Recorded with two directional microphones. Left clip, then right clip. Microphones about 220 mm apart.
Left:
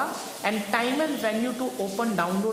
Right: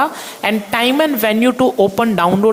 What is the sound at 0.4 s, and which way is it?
A woman's voice, 40° right (ahead or behind).